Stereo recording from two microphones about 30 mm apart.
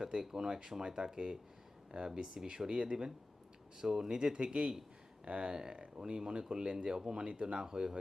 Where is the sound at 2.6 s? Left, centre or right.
Right.